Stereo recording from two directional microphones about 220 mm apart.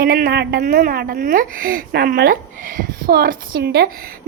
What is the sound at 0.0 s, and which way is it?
Speech, 45° right (ahead or behind).